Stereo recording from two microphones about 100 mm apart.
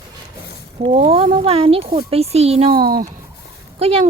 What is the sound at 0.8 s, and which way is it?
Speech, 85° right.